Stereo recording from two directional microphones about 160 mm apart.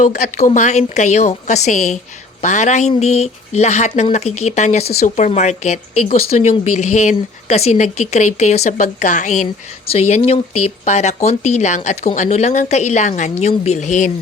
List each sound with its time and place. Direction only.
0.0 s speech: 50° left (ahead or behind)